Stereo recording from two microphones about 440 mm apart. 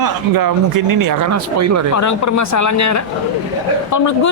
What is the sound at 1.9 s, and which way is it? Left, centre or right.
A woman's voice, left.